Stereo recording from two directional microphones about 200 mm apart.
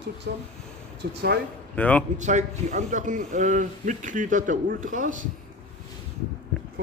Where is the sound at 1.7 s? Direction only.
5° left (ahead or behind).